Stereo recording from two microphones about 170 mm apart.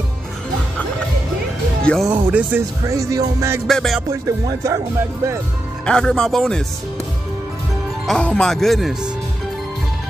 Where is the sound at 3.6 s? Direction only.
Centre (ahead or behind).